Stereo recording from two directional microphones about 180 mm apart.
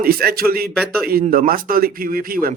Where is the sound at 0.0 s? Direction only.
60° right (ahead or behind).